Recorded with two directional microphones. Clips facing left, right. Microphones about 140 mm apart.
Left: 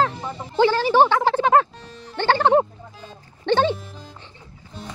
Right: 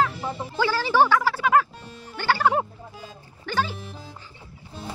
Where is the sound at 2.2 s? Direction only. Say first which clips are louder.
Left 5 dB; 25° left (ahead or behind).